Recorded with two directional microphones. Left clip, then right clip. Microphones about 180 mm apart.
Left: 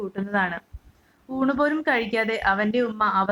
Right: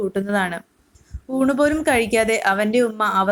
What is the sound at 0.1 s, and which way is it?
Speech, 25° right (ahead or behind).